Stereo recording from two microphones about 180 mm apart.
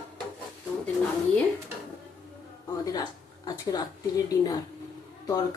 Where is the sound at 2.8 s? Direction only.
20° left (ahead or behind).